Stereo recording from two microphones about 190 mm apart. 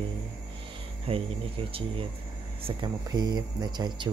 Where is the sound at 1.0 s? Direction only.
30° right (ahead or behind).